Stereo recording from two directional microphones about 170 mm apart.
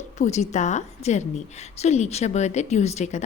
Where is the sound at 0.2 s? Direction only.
45° left (ahead or behind).